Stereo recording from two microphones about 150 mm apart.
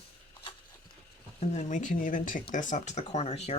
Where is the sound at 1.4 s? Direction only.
50° left (ahead or behind).